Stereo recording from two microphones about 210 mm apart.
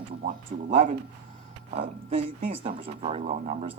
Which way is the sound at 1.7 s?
25° right (ahead or behind).